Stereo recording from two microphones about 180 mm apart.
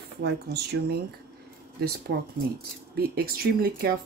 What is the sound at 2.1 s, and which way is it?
Speech, 65° right (ahead or behind).